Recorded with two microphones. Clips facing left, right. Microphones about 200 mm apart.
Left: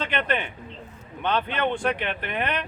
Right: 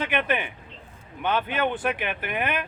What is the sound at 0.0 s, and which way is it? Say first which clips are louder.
Speech: right 1 dB; 10° right (ahead or behind).